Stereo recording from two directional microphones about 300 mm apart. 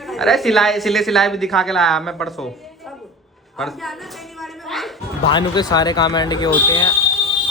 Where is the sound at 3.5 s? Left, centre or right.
Centre.